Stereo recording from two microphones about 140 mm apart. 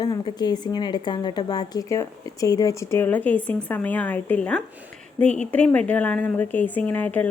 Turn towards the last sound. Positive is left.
turn(degrees=10)  # may be behind; listen again after turning